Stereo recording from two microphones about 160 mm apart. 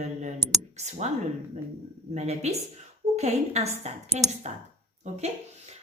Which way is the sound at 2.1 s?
45° right (ahead or behind).